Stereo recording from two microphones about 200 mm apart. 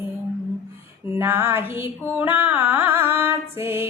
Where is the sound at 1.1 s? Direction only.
10° right (ahead or behind).